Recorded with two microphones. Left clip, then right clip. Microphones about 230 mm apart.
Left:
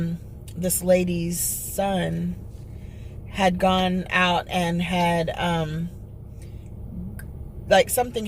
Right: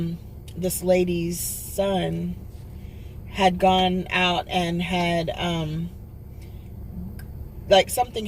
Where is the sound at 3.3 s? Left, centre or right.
Centre.